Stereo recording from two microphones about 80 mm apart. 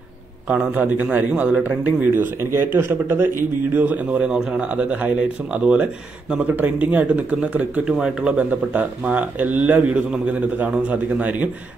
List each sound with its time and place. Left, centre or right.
0.5 s speech: centre
3.7 s speech: centre